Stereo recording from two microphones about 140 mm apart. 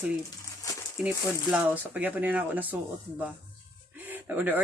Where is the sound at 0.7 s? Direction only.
25° left (ahead or behind).